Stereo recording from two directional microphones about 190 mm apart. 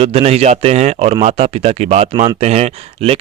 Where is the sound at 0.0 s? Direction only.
30° right (ahead or behind).